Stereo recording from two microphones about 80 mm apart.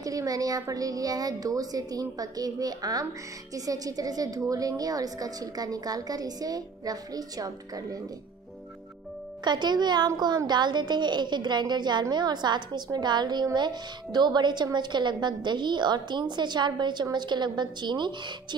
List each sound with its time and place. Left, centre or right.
0.0 s a woman's voice: right
9.4 s a woman's voice: right